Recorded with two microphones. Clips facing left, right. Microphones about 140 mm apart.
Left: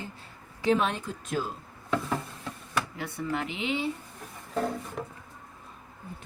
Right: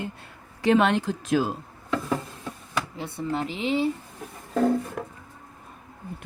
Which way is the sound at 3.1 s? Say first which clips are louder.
Right 3 dB; 30° right (ahead or behind).